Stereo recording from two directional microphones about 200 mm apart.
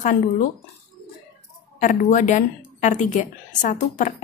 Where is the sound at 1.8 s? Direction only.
40° left (ahead or behind).